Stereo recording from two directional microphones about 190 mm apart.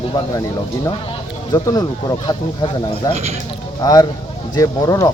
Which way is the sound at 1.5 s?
20° left (ahead or behind).